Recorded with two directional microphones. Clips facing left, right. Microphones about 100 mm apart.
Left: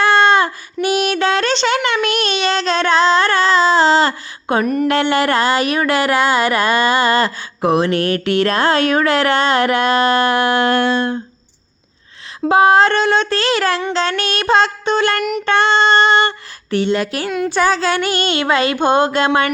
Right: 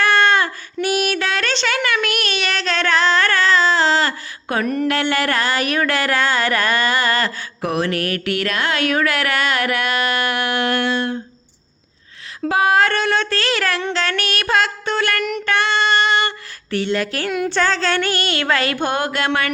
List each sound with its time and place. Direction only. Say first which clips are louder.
0.0 s child singing: left 3 dB; 20° left (ahead or behind)
4.6 s a sound: left 2 dB; 10° left (ahead or behind)
4.9 s speech: left 4 dB; 20° left (ahead or behind)
12.5 s speech: left 5 dB; 30° left (ahead or behind)
15.2 s a sound: left 3 dB; 10° left (ahead or behind)
15.4 s female singing: left 5 dB; 30° left (ahead or behind)
17.2 s speech: left 2 dB; 5° right (ahead or behind)
17.5 s speech: left 5 dB; 10° left (ahead or behind)